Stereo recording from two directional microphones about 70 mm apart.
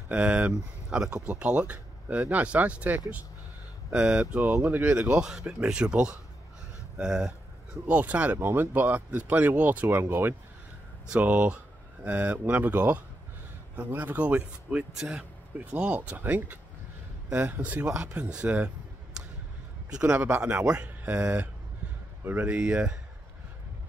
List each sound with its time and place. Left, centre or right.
0.1 s speech: centre
5.2 s speech: centre
20.2 s speech: right